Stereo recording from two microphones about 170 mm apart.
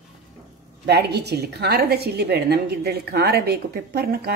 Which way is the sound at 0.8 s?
75° right (ahead or behind).